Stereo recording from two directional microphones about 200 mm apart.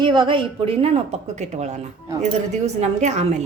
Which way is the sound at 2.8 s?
35° right (ahead or behind).